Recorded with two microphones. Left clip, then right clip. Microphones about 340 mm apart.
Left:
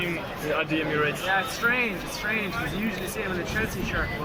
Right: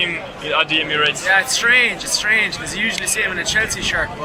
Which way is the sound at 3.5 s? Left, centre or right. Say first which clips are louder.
Right 11 dB; right.